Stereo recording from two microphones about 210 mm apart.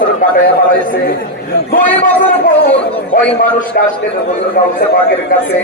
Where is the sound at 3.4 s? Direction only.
40° left (ahead or behind).